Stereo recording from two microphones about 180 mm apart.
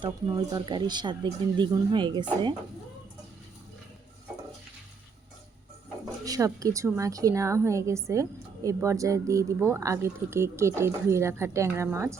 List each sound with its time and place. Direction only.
0.0 s speech: 25° right (ahead or behind)
6.2 s a woman's voice: 20° right (ahead or behind)